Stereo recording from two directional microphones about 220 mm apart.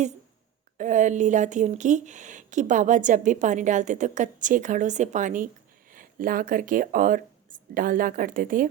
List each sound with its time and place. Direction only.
0.8 s a woman's voice: 35° right (ahead or behind)